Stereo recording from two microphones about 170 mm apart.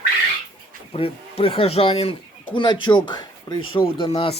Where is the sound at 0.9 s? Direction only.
35° left (ahead or behind).